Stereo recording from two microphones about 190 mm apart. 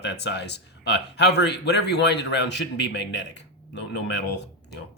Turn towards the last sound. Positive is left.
turn(degrees=65)  # may be behind; listen again after turning